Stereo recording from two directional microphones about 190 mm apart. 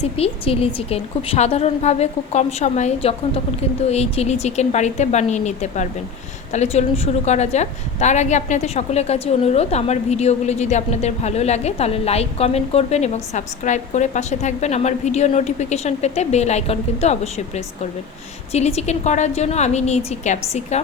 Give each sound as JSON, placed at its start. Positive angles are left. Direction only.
{"t": 0.0, "sound": "a woman's voice", "side_deg": 30}